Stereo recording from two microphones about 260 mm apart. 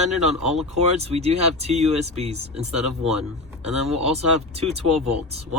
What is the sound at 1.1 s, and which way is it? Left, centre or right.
Speech, right.